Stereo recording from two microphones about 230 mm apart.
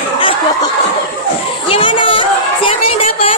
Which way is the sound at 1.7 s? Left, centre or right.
Left.